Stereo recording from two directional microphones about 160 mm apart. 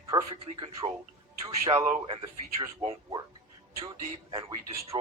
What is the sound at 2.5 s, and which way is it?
Speech, 30° right (ahead or behind).